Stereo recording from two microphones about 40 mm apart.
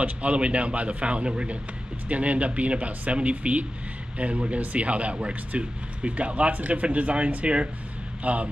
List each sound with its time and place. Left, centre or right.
0.0 s a man's voice: right